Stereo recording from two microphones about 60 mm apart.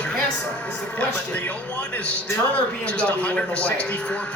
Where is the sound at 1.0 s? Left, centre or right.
Left.